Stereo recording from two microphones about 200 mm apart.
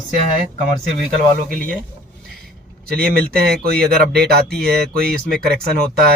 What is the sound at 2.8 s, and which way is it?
Speech, 50° right (ahead or behind).